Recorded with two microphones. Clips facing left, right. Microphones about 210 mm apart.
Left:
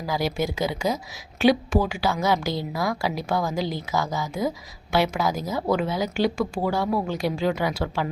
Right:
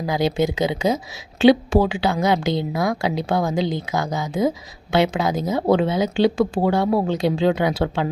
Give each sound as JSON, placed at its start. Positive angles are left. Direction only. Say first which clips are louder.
{"t": 0.1, "sound": "a woman's voice", "louder": "right 5 dB", "side_deg": -20}